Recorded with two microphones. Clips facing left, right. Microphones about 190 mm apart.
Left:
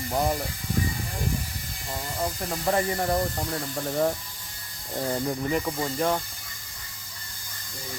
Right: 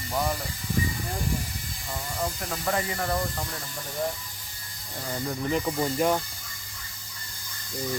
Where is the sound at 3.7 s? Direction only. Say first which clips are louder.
Left 6 dB; 60° left (ahead or behind).